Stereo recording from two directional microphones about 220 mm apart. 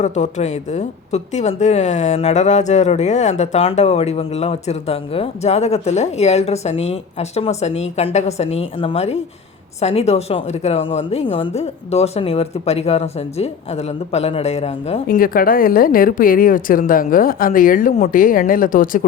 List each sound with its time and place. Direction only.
0.0 s speech: 30° left (ahead or behind)
15.0 s speech: 40° left (ahead or behind)